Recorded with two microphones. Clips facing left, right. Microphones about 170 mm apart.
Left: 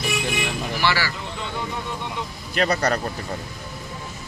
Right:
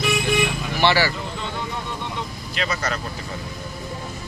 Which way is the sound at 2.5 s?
40° left (ahead or behind).